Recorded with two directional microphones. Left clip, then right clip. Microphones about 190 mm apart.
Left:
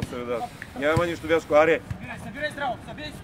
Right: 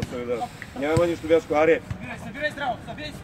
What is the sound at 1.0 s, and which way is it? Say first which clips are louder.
Speech: right 3 dB; 25° left (ahead or behind).